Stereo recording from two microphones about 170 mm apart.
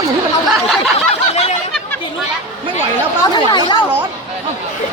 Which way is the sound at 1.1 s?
40° left (ahead or behind).